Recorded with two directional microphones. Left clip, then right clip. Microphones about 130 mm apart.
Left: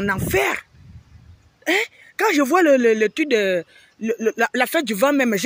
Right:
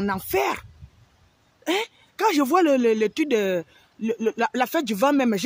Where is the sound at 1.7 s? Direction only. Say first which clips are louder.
Left 5 dB; 10° left (ahead or behind).